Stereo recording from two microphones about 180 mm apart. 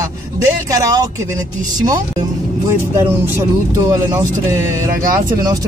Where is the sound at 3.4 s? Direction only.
20° right (ahead or behind).